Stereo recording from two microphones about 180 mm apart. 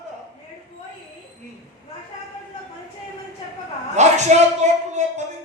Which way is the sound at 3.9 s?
40° right (ahead or behind).